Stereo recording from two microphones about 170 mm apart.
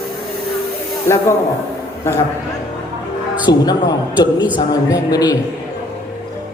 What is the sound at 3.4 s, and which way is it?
A man's voice, 25° left (ahead or behind).